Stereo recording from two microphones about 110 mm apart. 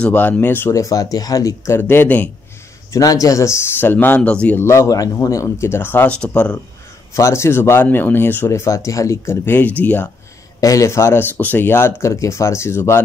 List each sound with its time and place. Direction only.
0.0 s speech: 15° left (ahead or behind)
2.9 s speech: 30° left (ahead or behind); by 4.6 s 10° left (ahead or behind)
4.6 s speech: 30° left (ahead or behind); by 6.6 s 10° left (ahead or behind)
7.2 s speech: 25° left (ahead or behind)
10.6 s speech: 30° left (ahead or behind)